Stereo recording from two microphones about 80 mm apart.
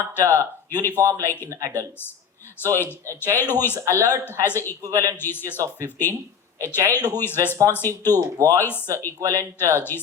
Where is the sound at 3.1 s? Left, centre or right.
Left.